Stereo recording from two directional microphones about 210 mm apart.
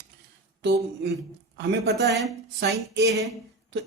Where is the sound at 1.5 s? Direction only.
50° right (ahead or behind).